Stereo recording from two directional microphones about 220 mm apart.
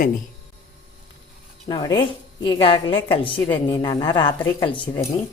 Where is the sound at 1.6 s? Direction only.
20° left (ahead or behind).